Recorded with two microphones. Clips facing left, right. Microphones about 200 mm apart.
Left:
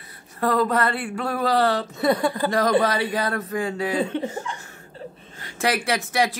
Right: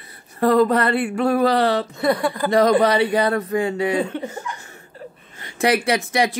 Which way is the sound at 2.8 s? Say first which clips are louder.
Right 6 dB; 65° right (ahead or behind).